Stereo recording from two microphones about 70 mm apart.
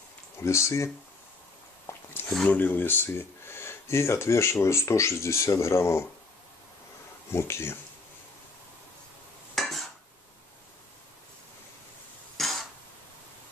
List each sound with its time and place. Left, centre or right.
0.4 s speech: left
1.9 s a sound: left
2.4 s speech: left
7.3 s speech: left
9.6 s dishes: centre
12.4 s cough: centre